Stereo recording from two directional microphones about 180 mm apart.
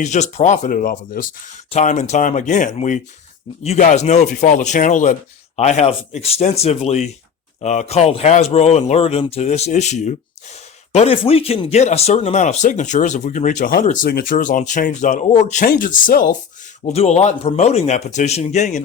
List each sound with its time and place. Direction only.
0.0 s speech: 40° left (ahead or behind)
16.8 s speech: 35° left (ahead or behind)